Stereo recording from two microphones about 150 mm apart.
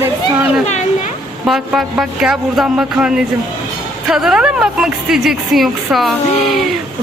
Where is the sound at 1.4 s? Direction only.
Centre (ahead or behind).